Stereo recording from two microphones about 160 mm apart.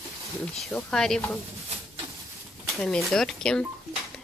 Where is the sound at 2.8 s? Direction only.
5° left (ahead or behind).